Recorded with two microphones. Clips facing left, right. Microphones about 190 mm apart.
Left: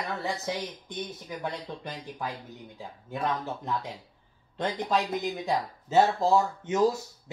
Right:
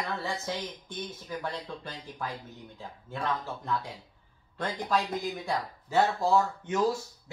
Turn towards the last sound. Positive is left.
turn(degrees=20)  # may be behind; listen again after turning